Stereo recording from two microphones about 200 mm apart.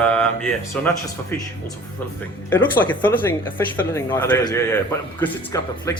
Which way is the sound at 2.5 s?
10° left (ahead or behind).